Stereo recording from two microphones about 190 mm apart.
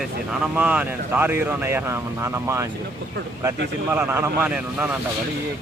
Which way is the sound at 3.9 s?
10° right (ahead or behind).